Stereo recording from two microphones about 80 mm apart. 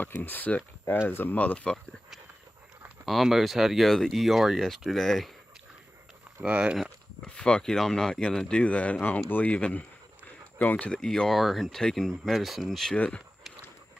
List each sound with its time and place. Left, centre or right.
0.0 s speech: left
3.1 s speech: centre
6.4 s speech: centre
7.2 s speech: centre
10.9 s speech: centre
12.9 s speech: centre